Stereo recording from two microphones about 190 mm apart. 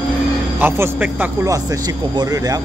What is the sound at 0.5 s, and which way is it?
Speech, 10° right (ahead or behind).